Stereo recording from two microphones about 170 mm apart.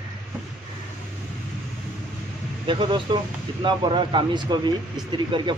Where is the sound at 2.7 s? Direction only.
30° right (ahead or behind).